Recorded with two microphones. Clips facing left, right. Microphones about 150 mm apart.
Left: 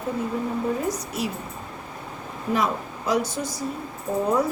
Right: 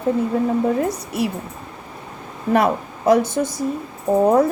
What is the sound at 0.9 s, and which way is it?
Speech, 60° right (ahead or behind).